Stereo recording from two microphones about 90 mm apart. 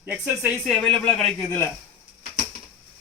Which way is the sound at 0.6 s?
10° left (ahead or behind).